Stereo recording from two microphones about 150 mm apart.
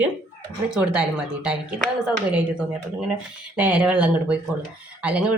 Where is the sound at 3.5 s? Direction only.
10° right (ahead or behind).